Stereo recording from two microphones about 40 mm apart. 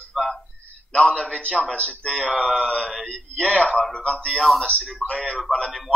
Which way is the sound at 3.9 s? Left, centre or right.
Left.